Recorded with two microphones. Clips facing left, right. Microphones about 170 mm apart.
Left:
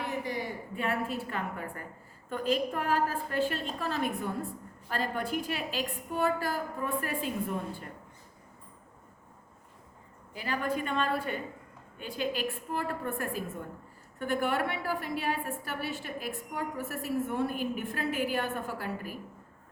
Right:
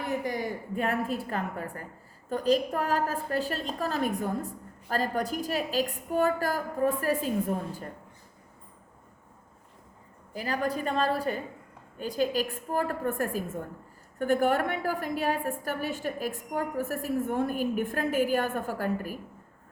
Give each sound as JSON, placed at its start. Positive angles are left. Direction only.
{"t": 0.8, "sound": "a woman's voice", "side_deg": -40}
{"t": 10.3, "sound": "a woman's voice", "side_deg": -40}